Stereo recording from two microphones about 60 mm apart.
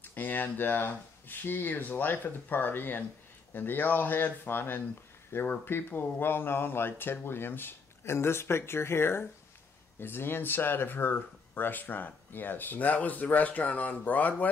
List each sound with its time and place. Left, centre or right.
0.0 s speech: left